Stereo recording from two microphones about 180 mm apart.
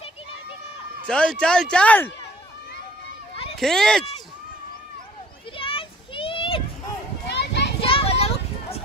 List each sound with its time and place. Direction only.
1.0 s a man's voice: 5° left (ahead or behind)
3.5 s speech: 5° left (ahead or behind)
5.6 s children playing: 30° left (ahead or behind)
7.2 s children playing: 70° left (ahead or behind)
7.8 s a sound: 30° left (ahead or behind)